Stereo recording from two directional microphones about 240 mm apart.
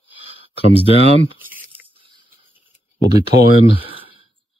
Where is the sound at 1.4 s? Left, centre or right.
Centre.